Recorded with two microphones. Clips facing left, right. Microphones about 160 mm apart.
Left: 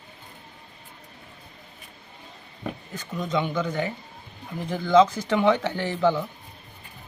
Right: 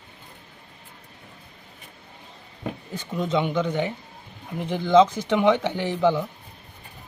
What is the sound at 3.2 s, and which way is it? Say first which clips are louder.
Speech: right 3 dB; 25° right (ahead or behind).